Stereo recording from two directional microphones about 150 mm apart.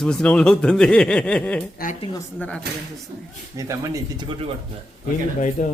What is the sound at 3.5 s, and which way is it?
Speech, 20° right (ahead or behind).